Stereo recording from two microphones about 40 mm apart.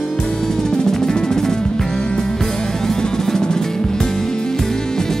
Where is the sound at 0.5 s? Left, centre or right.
Centre.